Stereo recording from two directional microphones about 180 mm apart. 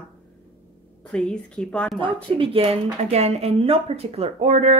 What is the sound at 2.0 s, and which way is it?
Speech, 30° right (ahead or behind).